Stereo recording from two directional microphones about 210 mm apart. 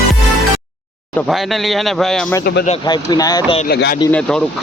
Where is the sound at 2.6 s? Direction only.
25° left (ahead or behind).